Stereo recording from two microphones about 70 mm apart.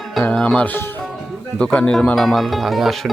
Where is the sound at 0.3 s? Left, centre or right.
Centre.